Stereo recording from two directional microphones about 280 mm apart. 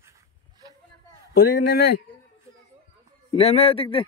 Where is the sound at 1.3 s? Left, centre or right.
Left.